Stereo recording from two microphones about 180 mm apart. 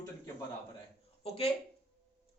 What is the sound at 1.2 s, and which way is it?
Speech, 35° left (ahead or behind).